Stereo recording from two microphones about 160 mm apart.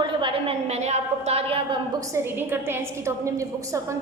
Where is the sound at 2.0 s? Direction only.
20° right (ahead or behind).